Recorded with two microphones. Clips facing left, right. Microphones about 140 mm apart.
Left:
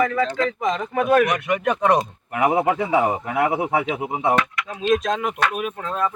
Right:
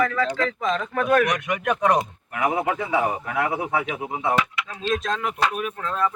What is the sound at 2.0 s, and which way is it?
Speech, 25° left (ahead or behind).